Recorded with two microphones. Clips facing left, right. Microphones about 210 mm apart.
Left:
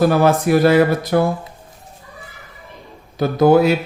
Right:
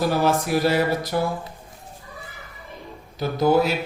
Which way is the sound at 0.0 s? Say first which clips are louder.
Left 7 dB; 55° left (ahead or behind).